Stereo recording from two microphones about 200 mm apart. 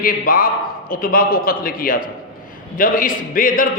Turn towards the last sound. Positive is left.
turn(degrees=45)  # may be behind; listen again after turning